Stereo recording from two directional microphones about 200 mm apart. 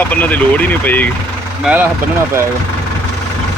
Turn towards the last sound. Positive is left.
turn(degrees=-10)  # may be behind; listen again after turning